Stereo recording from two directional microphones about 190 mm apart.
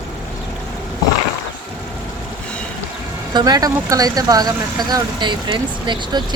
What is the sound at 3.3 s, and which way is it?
Speech, 20° right (ahead or behind).